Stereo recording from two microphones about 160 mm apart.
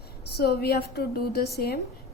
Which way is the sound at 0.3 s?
80° left.